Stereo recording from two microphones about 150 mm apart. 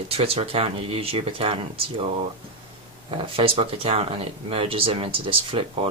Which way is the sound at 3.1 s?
35° right (ahead or behind).